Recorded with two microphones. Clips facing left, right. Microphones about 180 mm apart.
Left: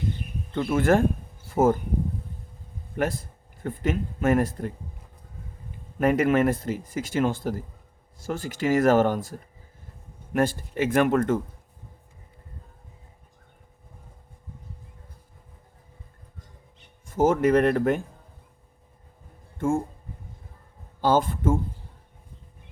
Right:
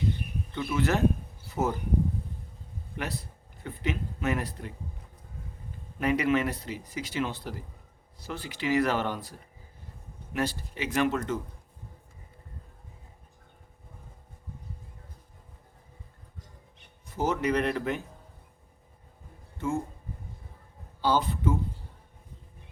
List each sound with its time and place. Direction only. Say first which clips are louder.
0.5 s speech: left 7 dB; 50° left (ahead or behind)
1.5 s a sound: left 9 dB; 50° left (ahead or behind)
2.9 s speech: left 9 dB; 50° left (ahead or behind)
6.0 s speech: left 5 dB; 50° left (ahead or behind)
17.1 s speech: left 8 dB; 50° left (ahead or behind)
19.5 s speech: left 6 dB; 50° left (ahead or behind)
21.0 s speech: left 5 dB; 50° left (ahead or behind)